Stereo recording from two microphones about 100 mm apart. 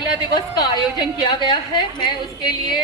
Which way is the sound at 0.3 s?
45° left (ahead or behind).